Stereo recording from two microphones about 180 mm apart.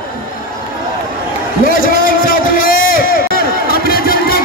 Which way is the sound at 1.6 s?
50° left (ahead or behind).